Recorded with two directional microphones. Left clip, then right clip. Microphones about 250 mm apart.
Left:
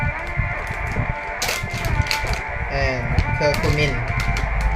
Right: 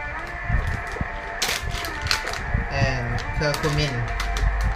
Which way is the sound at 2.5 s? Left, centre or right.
Left.